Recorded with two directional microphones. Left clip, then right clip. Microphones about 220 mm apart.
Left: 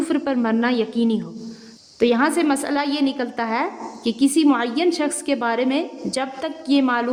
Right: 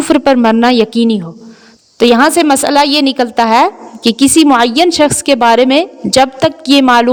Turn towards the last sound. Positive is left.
turn(degrees=-40)  # may be behind; listen again after turning